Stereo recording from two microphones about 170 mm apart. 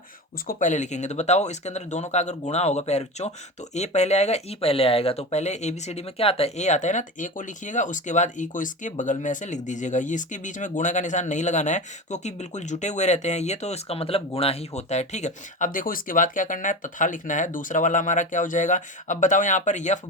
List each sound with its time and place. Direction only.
0.4 s speech: 45° left (ahead or behind)